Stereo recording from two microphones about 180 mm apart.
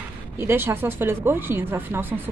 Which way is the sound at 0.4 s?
15° right (ahead or behind).